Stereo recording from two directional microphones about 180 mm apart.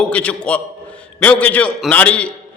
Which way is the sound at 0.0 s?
5° left (ahead or behind).